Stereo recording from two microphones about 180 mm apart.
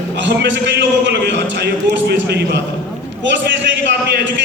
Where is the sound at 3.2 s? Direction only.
85° right.